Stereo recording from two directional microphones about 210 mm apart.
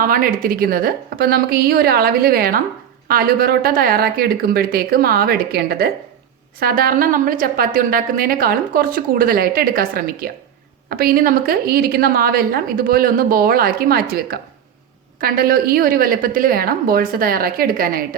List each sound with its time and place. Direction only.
0.0 s a woman's voice: 40° right (ahead or behind)